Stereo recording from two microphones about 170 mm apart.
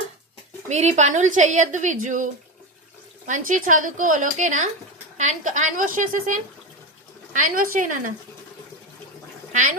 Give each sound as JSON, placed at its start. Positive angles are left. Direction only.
{"t": 0.7, "sound": "a woman's voice", "side_deg": -40}
{"t": 9.5, "sound": "speech", "side_deg": -50}